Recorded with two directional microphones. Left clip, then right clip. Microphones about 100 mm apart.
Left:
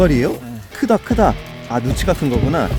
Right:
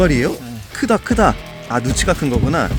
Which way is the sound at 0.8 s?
20° left (ahead or behind).